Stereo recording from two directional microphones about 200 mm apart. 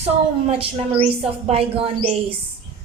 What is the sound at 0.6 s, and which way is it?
A woman's voice, 30° right (ahead or behind).